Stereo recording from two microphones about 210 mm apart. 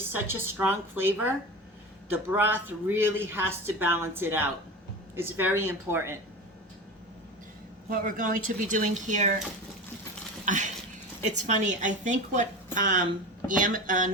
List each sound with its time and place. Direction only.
0.3 s speech: 10° right (ahead or behind)
2.3 s speech: 10° right (ahead or behind)
7.9 s a woman's voice: 40° right (ahead or behind)
10.4 s a sound: 35° right (ahead or behind)
11.3 s a woman's voice: 35° right (ahead or behind)